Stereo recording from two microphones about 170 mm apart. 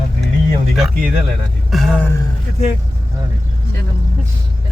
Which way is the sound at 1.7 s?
5° left (ahead or behind).